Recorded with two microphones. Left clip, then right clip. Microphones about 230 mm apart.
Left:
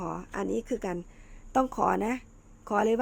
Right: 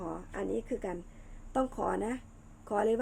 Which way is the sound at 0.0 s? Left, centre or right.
Left.